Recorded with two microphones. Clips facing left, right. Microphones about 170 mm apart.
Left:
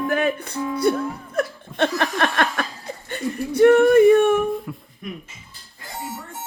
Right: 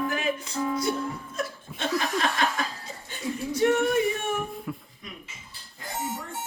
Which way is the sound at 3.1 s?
60° left (ahead or behind).